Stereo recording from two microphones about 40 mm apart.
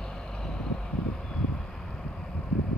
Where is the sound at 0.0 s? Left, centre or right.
Centre.